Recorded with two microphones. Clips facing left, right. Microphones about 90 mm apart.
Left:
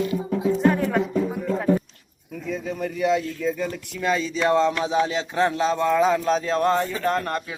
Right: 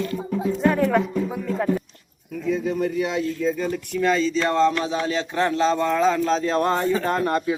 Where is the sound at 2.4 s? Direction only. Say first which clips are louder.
Right 5 dB; centre (ahead or behind).